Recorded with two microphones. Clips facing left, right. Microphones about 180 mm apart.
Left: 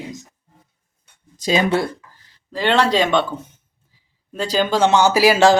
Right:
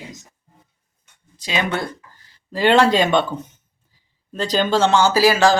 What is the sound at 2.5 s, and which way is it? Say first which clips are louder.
Speech: right 3 dB; 5° right (ahead or behind).